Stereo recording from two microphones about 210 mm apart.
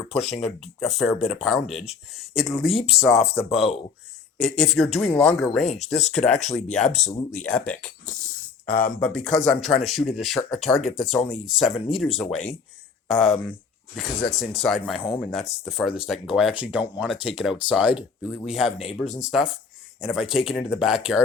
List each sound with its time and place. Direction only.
0.3 s speech: centre (ahead or behind)
3.2 s speech: 30° left (ahead or behind)
4.4 s speech: centre (ahead or behind)
8.6 s speech: 40° left (ahead or behind)
9.0 s speech: 5° left (ahead or behind)